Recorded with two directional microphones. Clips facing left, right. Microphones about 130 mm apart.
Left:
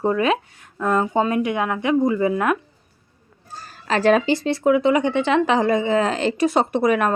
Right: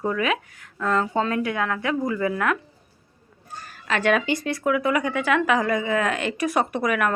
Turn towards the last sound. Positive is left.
turn(degrees=30)  # may be behind; listen again after turning